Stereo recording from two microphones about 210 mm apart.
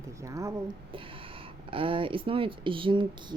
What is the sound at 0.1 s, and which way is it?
Speech, 15° right (ahead or behind).